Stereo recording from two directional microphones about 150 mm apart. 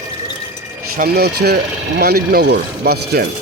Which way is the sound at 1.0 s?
90° right.